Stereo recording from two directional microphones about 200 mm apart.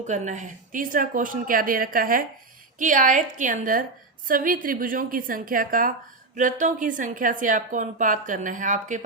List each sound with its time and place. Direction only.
0.1 s a woman's voice: 35° right (ahead or behind)